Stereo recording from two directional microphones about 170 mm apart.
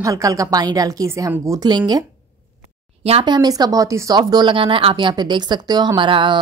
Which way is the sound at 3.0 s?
35° right (ahead or behind).